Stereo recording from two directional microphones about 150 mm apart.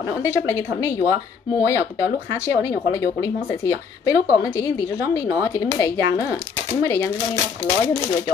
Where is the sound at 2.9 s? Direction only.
20° left (ahead or behind).